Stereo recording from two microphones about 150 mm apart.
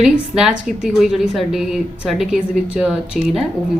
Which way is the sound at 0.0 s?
5° right (ahead or behind).